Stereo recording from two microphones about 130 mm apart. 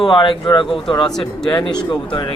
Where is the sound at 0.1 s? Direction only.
40° left (ahead or behind).